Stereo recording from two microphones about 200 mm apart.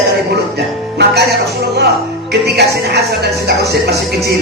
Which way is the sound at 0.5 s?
55° right (ahead or behind).